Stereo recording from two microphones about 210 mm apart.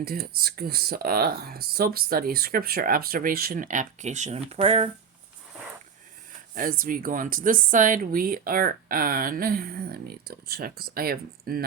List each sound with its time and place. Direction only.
0.0 s speech: 45° right (ahead or behind); by 4.9 s 30° right (ahead or behind)
6.5 s speech: 40° right (ahead or behind)